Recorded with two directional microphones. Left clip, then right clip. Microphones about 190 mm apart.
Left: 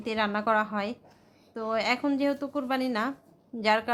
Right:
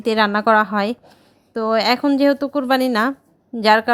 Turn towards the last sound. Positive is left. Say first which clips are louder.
# right 12 dB
turn(degrees=-35)  # may be behind; listen again after turning